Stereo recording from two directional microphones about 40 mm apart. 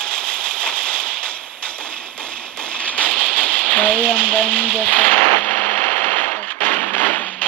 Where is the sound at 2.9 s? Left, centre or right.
Left.